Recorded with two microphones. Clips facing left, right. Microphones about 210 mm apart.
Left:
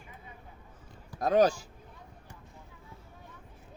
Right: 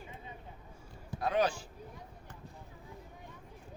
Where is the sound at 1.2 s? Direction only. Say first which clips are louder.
Left 7 dB; 40° left (ahead or behind).